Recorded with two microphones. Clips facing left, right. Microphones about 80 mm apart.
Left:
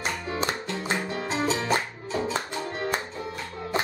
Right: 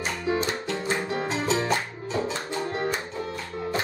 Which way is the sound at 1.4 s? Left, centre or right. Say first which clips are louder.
Left 2 dB; centre.